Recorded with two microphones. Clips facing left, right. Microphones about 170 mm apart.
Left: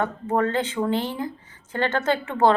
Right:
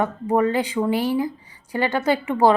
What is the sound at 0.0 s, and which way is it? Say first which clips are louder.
A woman's voice: right 3 dB; 10° right (ahead or behind).